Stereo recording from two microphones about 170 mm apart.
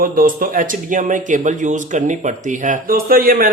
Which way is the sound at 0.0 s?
55° right (ahead or behind).